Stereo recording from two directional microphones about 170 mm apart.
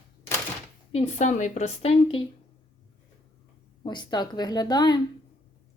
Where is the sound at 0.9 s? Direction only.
40° left (ahead or behind).